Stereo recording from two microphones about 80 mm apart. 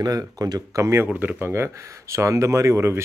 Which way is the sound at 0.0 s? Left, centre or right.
Right.